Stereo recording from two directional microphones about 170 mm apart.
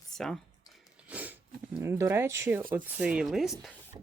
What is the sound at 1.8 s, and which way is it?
Speech, 15° right (ahead or behind).